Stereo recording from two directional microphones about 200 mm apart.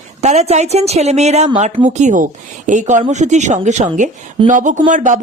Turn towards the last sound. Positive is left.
turn(degrees=-40)  # may be behind; listen again after turning